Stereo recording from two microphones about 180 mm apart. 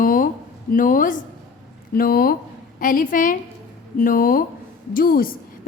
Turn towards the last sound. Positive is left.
turn(degrees=50)  # may be behind; listen again after turning